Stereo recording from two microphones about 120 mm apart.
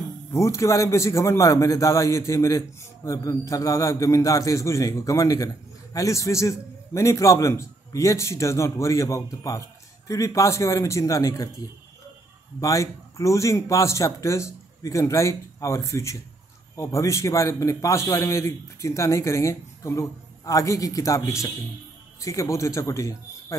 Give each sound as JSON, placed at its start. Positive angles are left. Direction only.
{"t": 0.3, "sound": "a man's voice", "side_deg": 25}
{"t": 12.5, "sound": "a man's voice", "side_deg": 30}